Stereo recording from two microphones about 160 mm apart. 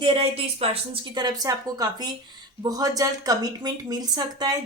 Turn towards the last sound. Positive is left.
turn(degrees=-25)  # may be behind; listen again after turning